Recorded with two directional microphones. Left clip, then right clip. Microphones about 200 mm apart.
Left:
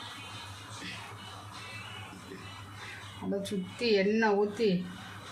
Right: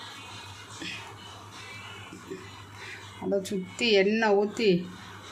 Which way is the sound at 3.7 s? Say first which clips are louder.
Right 4 dB; 45° right (ahead or behind).